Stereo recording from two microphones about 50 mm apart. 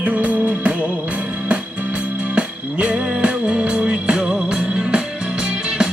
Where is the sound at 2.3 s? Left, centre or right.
Right.